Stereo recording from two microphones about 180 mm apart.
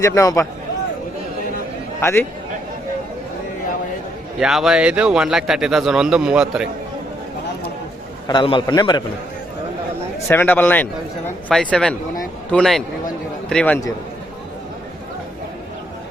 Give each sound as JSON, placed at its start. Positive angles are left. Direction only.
{"t": 0.0, "sound": "a man's voice", "side_deg": 15}
{"t": 2.0, "sound": "a man's voice", "side_deg": 15}
{"t": 4.4, "sound": "speech", "side_deg": 0}
{"t": 8.3, "sound": "a man's voice", "side_deg": 25}
{"t": 10.2, "sound": "a man's voice", "side_deg": 10}